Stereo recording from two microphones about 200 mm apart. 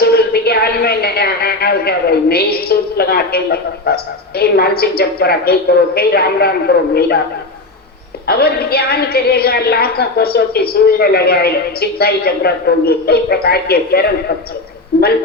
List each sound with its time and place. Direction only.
0.0 s a woman's voice: 50° left (ahead or behind)
8.3 s a woman's voice: 50° left (ahead or behind)